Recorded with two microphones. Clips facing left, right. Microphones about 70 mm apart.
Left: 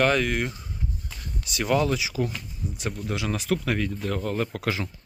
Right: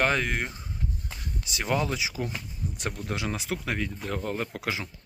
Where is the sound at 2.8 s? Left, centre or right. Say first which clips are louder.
Left 2 dB; right.